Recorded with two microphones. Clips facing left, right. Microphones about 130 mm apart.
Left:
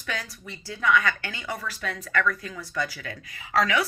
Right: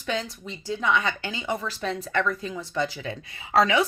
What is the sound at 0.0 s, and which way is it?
Speech, 20° right (ahead or behind).